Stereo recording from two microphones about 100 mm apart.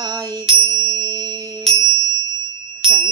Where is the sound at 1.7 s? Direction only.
70° right (ahead or behind).